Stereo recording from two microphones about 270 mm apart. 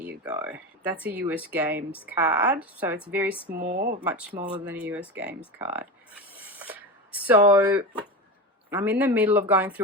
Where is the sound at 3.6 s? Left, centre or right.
Right.